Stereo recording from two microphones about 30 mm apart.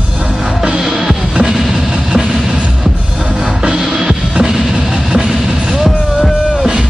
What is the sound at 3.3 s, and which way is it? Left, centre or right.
Music, centre.